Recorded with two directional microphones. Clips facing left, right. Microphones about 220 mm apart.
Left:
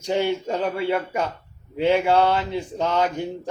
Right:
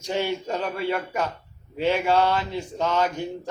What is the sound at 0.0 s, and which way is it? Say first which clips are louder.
Speech: left 4 dB; 15° left (ahead or behind).